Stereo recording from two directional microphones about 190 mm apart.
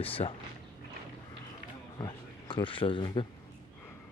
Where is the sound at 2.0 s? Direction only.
25° left (ahead or behind).